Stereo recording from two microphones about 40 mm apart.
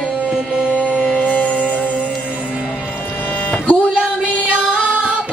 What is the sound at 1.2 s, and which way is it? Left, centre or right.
Music, left.